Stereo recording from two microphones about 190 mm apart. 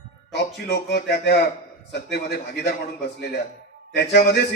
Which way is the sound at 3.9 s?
60° left (ahead or behind).